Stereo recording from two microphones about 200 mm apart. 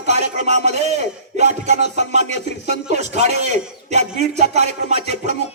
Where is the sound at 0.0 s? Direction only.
35° right (ahead or behind).